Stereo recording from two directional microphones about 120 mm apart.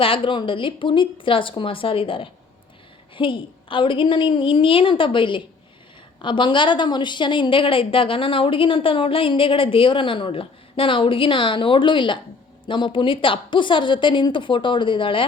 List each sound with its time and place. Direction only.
0.0 s a woman's voice: 45° left (ahead or behind)